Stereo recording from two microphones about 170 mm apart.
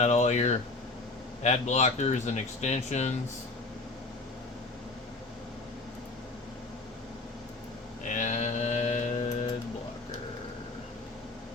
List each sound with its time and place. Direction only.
0.0 s speech: 40° left (ahead or behind)
8.1 s mantra: 45° left (ahead or behind)